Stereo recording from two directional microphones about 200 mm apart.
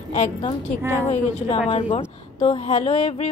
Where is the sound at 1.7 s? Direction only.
30° left (ahead or behind).